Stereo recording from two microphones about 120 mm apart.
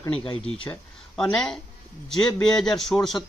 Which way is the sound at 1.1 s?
5° left (ahead or behind).